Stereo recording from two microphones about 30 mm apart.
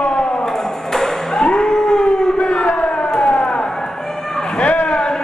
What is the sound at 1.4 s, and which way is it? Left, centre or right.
Howl, left.